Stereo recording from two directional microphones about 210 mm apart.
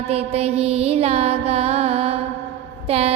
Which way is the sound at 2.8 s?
30° right (ahead or behind).